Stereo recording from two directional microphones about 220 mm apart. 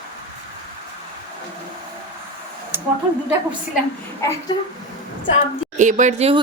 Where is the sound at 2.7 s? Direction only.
10° right (ahead or behind).